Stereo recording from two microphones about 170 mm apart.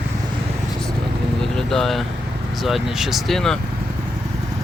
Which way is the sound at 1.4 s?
Centre (ahead or behind).